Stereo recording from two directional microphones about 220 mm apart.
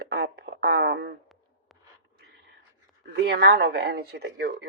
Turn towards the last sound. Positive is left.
turn(degrees=-50)  # may be behind; listen again after turning